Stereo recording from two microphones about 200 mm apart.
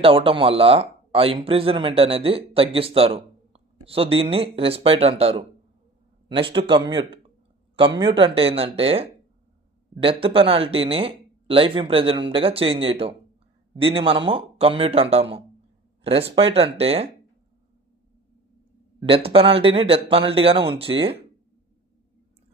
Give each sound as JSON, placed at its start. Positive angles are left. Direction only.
{"t": 0.0, "sound": "speech", "side_deg": -25}
{"t": 10.2, "sound": "speech", "side_deg": -30}
{"t": 18.9, "sound": "speech", "side_deg": -30}